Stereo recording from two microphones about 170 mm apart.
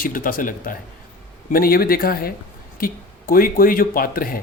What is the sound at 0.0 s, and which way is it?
Speech, 55° left (ahead or behind).